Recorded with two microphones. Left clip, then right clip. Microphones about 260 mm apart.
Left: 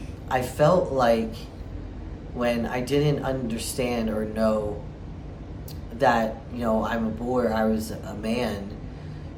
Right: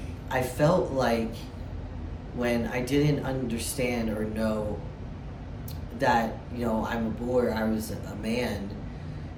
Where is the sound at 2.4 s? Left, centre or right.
Centre.